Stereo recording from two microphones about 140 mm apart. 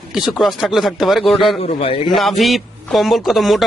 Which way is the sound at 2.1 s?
Centre (ahead or behind).